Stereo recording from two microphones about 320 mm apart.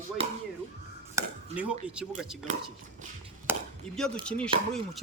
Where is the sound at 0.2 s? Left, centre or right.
Centre.